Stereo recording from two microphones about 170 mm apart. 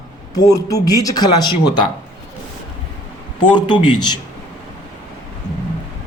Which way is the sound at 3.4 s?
25° left (ahead or behind).